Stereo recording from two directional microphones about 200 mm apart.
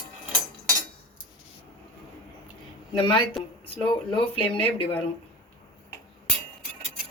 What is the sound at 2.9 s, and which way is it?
A woman's voice, 25° left (ahead or behind).